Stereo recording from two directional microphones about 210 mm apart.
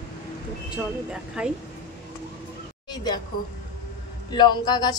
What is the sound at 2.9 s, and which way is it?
Speech, 20° left (ahead or behind).